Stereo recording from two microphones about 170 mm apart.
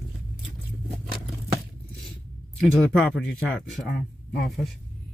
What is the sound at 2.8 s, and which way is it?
Speech, centre (ahead or behind).